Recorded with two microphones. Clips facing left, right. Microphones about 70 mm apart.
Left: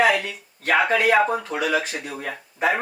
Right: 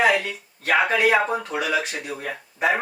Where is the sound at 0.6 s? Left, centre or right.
Centre.